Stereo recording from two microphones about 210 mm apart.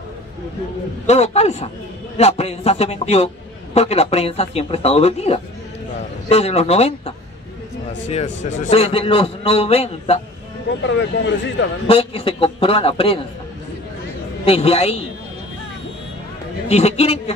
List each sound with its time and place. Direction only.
1.0 s a man's voice: 30° left (ahead or behind)
10.8 s speech: 60° left (ahead or behind)
11.9 s a man's voice: 25° left (ahead or behind)
14.4 s a man's voice: 30° left (ahead or behind)
16.6 s a man's voice: 30° left (ahead or behind)